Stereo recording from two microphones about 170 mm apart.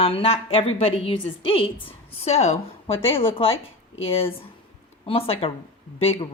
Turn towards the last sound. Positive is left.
turn(degrees=35)  # may be behind; listen again after turning